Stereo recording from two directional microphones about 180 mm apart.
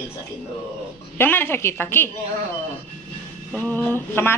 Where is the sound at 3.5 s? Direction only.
10° left (ahead or behind).